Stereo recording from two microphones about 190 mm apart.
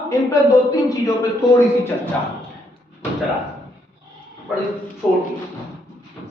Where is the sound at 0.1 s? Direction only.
15° left (ahead or behind).